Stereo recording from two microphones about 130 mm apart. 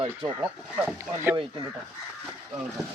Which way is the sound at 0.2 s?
20° right (ahead or behind).